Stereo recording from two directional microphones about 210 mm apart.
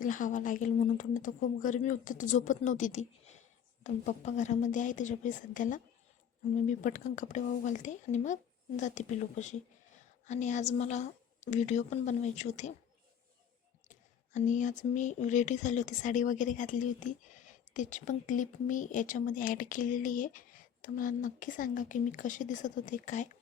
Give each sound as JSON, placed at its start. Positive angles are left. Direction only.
{"t": 0.0, "sound": "speech", "side_deg": 40}
{"t": 13.8, "sound": "speech", "side_deg": 35}